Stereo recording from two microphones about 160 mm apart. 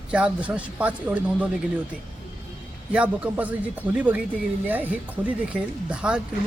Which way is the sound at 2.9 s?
10° right (ahead or behind).